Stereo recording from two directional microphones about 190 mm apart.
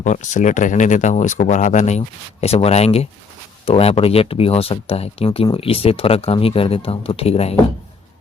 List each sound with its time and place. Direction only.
0.0 s speech: 40° left (ahead or behind)